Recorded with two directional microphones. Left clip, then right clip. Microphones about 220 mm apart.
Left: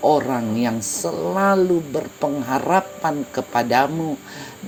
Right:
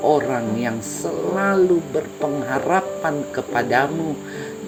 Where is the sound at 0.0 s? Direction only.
35° left (ahead or behind).